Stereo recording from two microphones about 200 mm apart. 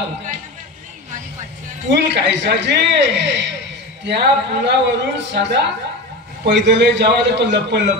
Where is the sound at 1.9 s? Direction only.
60° right (ahead or behind).